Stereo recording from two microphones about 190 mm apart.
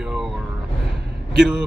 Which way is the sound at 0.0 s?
Centre (ahead or behind).